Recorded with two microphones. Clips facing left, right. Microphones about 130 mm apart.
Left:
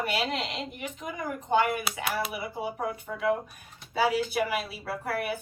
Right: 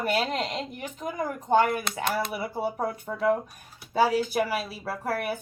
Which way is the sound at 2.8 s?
35° right (ahead or behind).